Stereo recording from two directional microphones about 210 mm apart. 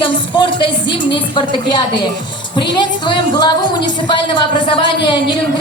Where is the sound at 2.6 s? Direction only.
20° left (ahead or behind).